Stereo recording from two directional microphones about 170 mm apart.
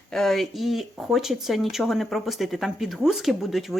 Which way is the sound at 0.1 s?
Centre (ahead or behind).